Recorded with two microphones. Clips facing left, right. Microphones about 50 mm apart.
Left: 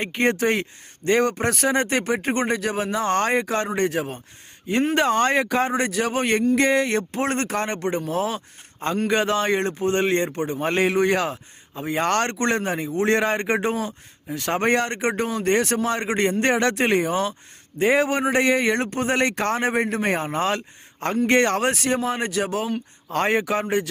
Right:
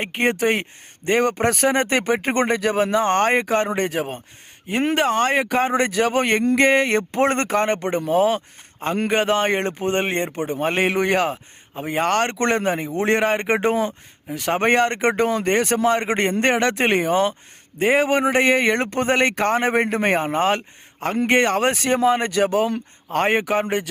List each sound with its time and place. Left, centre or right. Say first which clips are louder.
0.0 s speech: right 1 dB; right
1.3 s a man's voice: right 3 dB; right
4.9 s speech: right 1 dB; centre
5.4 s a man's voice: right 2 dB; right
9.0 s a man's voice: right 2 dB; right
11.9 s speech: right 2 dB; centre
12.3 s a man's voice: right 3 dB; right
14.3 s a man's voice: right 3 dB; right
15.4 s a man's voice: left 1 dB; right
17.7 s a man's voice: right 2 dB; right
21.6 s speech: right 4 dB; right
23.1 s a man's voice: right 2 dB; right